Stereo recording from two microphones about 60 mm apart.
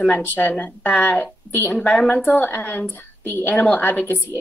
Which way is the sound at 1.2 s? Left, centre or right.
Left.